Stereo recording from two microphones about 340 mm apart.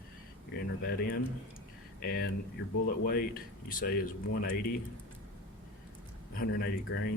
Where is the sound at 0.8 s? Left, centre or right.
Left.